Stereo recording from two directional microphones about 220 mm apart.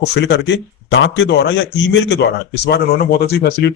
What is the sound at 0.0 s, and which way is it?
Speech, 50° left (ahead or behind).